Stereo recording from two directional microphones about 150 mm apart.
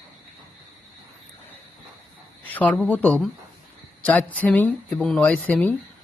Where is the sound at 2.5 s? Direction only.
5° left (ahead or behind).